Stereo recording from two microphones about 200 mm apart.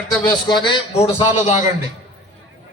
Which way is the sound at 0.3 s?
20° left (ahead or behind).